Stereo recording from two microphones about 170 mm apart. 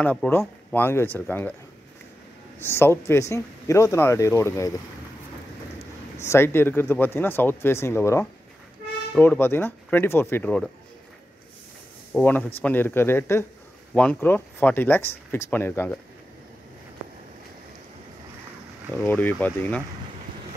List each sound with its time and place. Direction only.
0.0 s speech: 10° left (ahead or behind)
2.6 s speech: 15° left (ahead or behind)
6.2 s speech: 15° left (ahead or behind)
12.1 s speech: 10° left (ahead or behind)
19.0 s speech: 10° left (ahead or behind)